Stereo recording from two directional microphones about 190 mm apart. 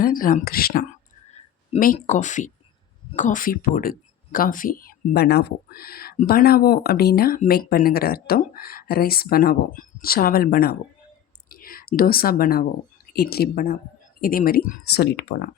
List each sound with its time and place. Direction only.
0.0 s speech: 45° left (ahead or behind)
2.0 s speech: 40° left (ahead or behind); by 15.4 s 55° left (ahead or behind)